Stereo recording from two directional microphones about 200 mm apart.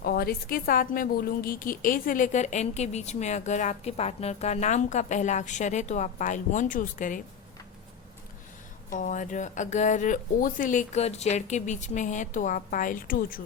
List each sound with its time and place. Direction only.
0.0 s a woman's voice: 50° left (ahead or behind)
8.9 s a woman's voice: 40° left (ahead or behind)